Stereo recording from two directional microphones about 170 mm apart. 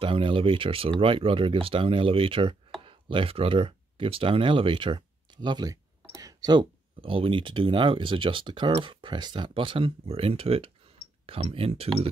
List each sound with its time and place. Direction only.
0.0 s speech: 30° right (ahead or behind)